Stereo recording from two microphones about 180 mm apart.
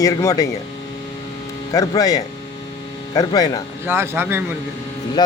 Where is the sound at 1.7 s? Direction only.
20° left (ahead or behind).